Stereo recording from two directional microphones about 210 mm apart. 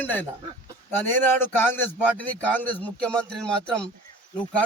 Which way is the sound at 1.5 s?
10° left (ahead or behind).